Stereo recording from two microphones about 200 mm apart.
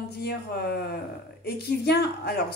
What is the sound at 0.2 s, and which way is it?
A woman's voice, 55° left (ahead or behind).